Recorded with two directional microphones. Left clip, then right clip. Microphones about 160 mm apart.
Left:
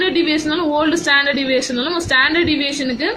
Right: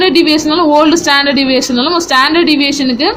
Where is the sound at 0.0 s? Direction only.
35° right (ahead or behind).